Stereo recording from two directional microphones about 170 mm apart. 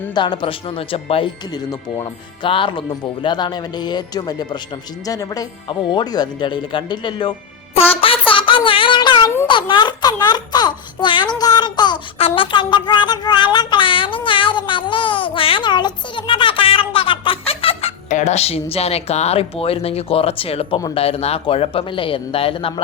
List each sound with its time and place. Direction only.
0.1 s speech: 25° left (ahead or behind)
8.3 s a sound: 30° left (ahead or behind)
9.5 s speech: 30° left (ahead or behind)